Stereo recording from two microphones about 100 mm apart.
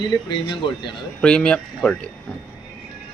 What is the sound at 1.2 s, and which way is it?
Speech, 10° left (ahead or behind).